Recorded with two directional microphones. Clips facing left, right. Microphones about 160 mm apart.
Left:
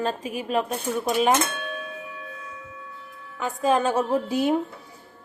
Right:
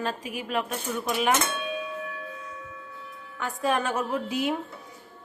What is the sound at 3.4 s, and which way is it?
A woman's voice, 20° left (ahead or behind).